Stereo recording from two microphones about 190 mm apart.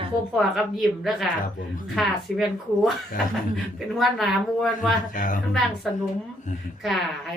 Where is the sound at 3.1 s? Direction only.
45° left (ahead or behind).